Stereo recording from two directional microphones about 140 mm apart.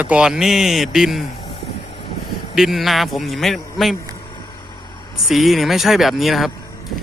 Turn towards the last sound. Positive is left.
turn(degrees=0)  # may be behind; listen again after turning